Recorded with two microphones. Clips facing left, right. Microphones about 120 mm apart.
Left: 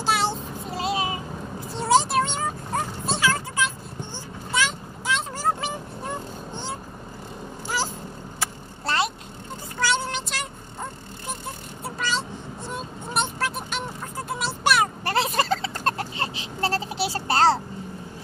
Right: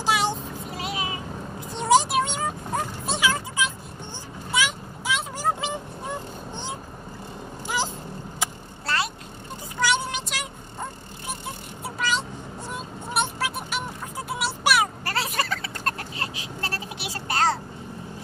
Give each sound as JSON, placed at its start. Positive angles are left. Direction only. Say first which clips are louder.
{"t": 0.0, "sound": "child singing", "louder": "even", "side_deg": -15}
{"t": 0.7, "sound": "vehicle", "louder": "left 6 dB", "side_deg": 30}
{"t": 1.7, "sound": "a sound", "louder": "right 1 dB", "side_deg": -15}
{"t": 4.5, "sound": "vehicle", "louder": "even", "side_deg": -10}
{"t": 7.6, "sound": "cat", "louder": "even", "side_deg": -15}
{"t": 8.8, "sound": "vehicle", "louder": "left 3 dB", "side_deg": 25}
{"t": 9.8, "sound": "a sound", "louder": "even", "side_deg": -15}
{"t": 11.8, "sound": "vehicle", "louder": "right 1 dB", "side_deg": -10}
{"t": 15.0, "sound": "a sound", "louder": "left 5 dB", "side_deg": 25}